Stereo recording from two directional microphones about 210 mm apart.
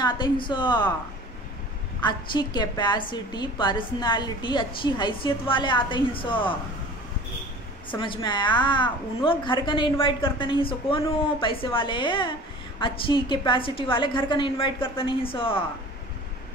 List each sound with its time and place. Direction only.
0.0 s a woman's voice: 20° left (ahead or behind)
2.0 s a woman's voice: 20° left (ahead or behind)
7.9 s a woman's voice: 25° left (ahead or behind)